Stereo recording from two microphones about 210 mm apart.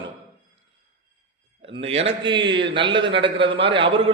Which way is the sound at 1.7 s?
30° right (ahead or behind).